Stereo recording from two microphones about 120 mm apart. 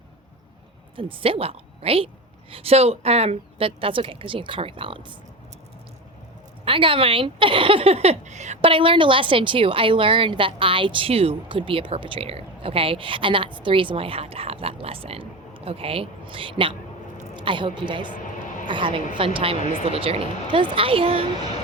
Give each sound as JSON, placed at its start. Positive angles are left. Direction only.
{"t": 0.9, "sound": "a woman's voice", "side_deg": -45}
{"t": 6.7, "sound": "a woman's voice", "side_deg": -45}
{"t": 8.6, "sound": "a woman's voice", "side_deg": -45}